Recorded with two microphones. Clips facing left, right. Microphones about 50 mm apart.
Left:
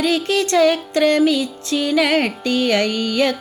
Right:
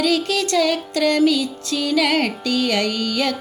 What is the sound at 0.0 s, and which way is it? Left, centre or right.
Music, left.